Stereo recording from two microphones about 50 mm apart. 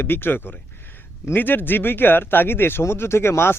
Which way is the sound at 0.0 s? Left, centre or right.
Left.